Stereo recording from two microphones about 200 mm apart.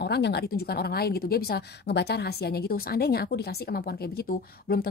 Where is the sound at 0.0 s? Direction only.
55° left (ahead or behind).